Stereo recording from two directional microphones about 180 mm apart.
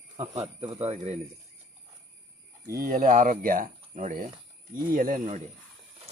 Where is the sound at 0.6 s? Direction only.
35° right (ahead or behind).